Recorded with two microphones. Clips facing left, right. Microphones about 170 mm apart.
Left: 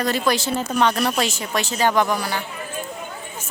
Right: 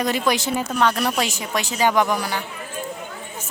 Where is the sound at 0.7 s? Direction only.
Centre (ahead or behind).